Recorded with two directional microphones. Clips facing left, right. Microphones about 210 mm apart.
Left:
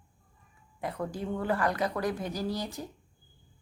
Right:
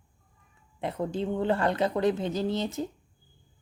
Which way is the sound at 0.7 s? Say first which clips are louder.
Right 4 dB; 25° right (ahead or behind).